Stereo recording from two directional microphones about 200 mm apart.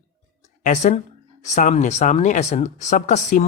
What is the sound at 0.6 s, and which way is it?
Speech, 35° left (ahead or behind).